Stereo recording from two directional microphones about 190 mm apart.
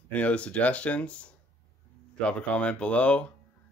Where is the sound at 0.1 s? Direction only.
5° left (ahead or behind).